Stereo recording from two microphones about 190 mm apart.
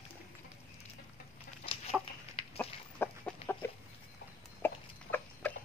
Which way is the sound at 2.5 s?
10° left (ahead or behind).